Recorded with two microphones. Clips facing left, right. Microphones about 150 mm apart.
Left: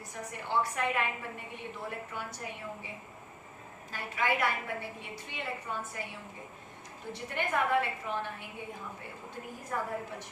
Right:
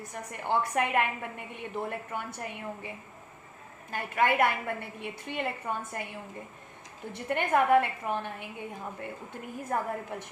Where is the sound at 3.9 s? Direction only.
55° right (ahead or behind).